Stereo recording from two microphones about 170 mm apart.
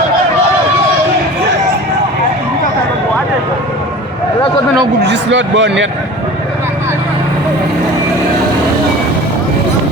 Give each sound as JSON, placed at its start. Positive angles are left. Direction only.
{"t": 5.0, "sound": "a man's voice", "side_deg": -90}